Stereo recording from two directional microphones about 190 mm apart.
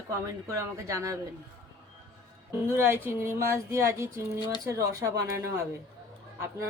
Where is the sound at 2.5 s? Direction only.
15° right (ahead or behind).